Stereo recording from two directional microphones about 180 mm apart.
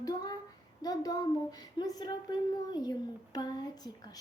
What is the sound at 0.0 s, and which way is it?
Child singing, 20° left (ahead or behind).